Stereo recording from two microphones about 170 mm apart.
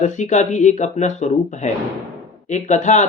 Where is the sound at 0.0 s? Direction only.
45° left (ahead or behind).